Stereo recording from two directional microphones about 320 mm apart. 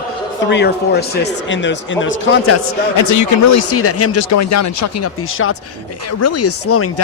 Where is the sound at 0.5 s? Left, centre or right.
Left.